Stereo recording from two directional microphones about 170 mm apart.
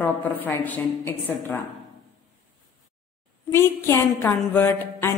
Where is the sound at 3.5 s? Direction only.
15° left (ahead or behind).